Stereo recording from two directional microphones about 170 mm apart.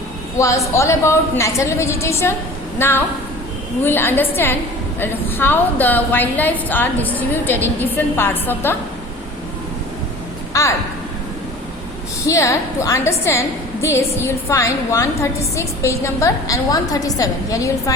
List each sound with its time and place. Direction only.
0.3 s a woman's voice: 20° left (ahead or behind)
12.2 s a woman's voice: 20° left (ahead or behind)